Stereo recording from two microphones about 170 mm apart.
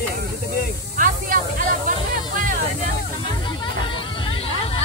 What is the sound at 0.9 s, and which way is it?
Snake, 50° right (ahead or behind).